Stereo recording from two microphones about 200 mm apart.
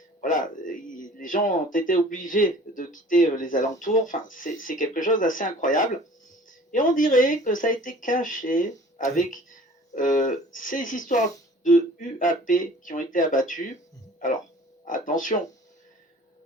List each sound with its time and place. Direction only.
0.2 s speech: 40° left (ahead or behind)